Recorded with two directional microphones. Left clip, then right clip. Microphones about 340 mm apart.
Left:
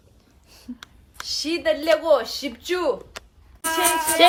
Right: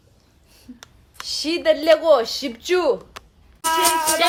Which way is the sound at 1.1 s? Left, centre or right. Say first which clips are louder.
Right 2 dB; right.